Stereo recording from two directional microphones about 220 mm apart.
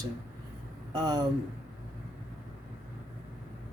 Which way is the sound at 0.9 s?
15° right (ahead or behind).